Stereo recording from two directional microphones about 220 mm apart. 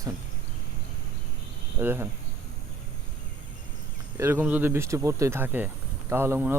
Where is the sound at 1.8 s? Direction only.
10° right (ahead or behind).